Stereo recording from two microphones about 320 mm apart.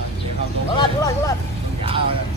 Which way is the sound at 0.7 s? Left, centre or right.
Centre.